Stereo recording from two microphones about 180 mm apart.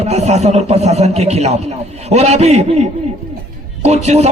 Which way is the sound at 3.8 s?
35° right (ahead or behind).